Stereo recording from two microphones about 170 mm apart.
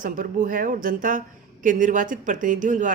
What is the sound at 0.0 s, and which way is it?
Speech, 50° right (ahead or behind).